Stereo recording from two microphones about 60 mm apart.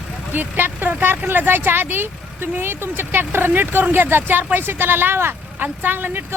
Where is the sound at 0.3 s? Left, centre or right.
Right.